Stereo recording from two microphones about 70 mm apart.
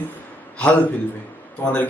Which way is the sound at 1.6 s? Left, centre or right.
Left.